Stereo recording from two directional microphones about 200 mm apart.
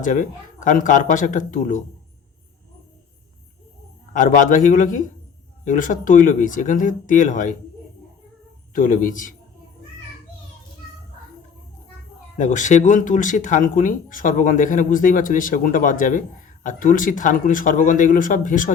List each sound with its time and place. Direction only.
0.0 s speech: 40° left (ahead or behind)
4.1 s speech: 40° left (ahead or behind)
8.7 s a man's voice: 40° left (ahead or behind)
12.4 s speech: 40° left (ahead or behind)